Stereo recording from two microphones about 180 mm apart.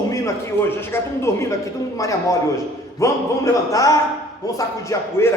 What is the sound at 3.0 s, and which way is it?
A man's voice, 15° left (ahead or behind).